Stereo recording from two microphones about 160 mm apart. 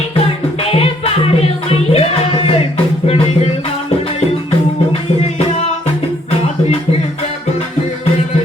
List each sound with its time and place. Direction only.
0.6 s music: 40° left (ahead or behind)
5.5 s music: 40° left (ahead or behind)